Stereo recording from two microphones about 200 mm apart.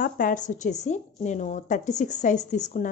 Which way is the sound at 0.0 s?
40° left (ahead or behind).